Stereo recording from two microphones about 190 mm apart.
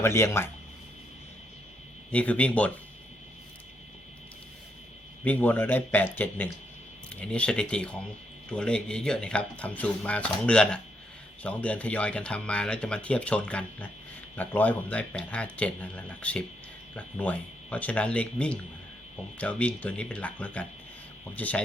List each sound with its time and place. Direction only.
0.0 s speech: 15° left (ahead or behind)
2.1 s speech: 5° left (ahead or behind)
5.2 s speech: 10° left (ahead or behind)